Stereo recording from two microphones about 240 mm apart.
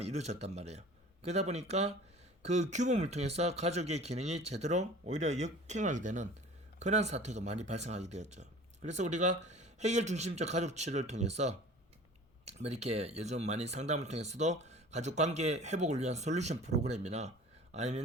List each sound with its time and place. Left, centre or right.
0.0 s speech: right